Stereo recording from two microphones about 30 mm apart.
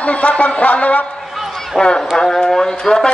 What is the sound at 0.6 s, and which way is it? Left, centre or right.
Speech, left.